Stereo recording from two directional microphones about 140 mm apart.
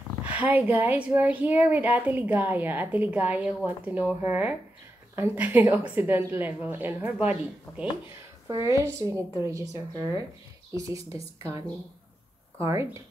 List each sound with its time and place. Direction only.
0.2 s speech: 10° right (ahead or behind)
8.5 s a woman's voice: 25° right (ahead or behind)